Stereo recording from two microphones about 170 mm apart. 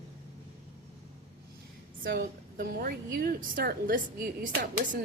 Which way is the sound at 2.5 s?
60° right (ahead or behind).